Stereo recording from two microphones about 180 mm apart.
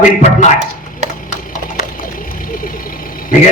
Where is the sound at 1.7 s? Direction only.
50° left (ahead or behind).